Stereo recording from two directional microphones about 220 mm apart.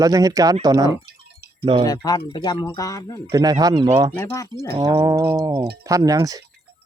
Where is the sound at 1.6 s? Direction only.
25° right (ahead or behind).